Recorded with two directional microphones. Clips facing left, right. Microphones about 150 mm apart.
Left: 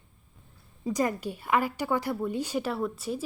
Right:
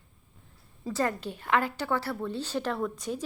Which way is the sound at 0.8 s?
15° left (ahead or behind).